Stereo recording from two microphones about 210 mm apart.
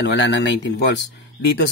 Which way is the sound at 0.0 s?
55° left (ahead or behind).